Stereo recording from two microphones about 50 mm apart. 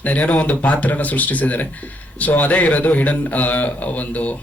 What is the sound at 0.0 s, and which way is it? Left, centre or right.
A man's voice, left.